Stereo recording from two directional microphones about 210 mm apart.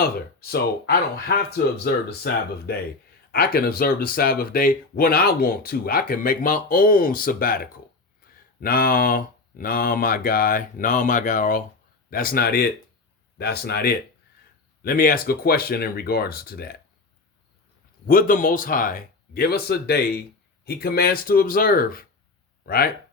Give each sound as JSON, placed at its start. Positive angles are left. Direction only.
{"t": 0.3, "sound": "speech", "side_deg": 50}
{"t": 18.0, "sound": "speech", "side_deg": 40}